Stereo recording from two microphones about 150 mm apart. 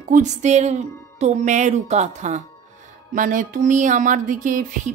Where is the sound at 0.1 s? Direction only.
50° right (ahead or behind).